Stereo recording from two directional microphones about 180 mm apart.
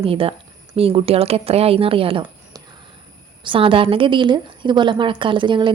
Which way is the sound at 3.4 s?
30° right (ahead or behind).